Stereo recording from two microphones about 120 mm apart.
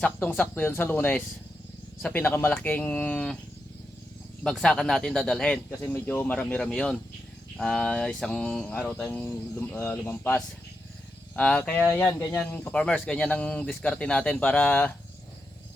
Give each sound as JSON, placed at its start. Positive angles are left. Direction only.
{"t": 0.0, "sound": "speech", "side_deg": 15}
{"t": 4.4, "sound": "speech", "side_deg": 5}
{"t": 5.9, "sound": "speech", "side_deg": 20}